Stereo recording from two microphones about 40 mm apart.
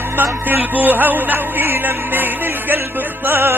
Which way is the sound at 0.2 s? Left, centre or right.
Right.